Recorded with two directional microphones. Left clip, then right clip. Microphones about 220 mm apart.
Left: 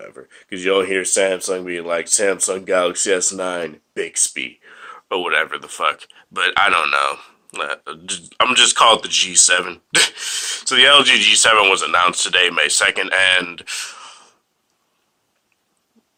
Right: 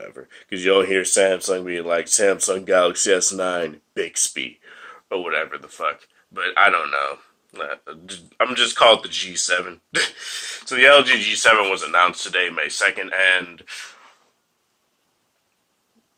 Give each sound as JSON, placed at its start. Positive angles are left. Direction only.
{"t": 0.0, "sound": "speech", "side_deg": 0}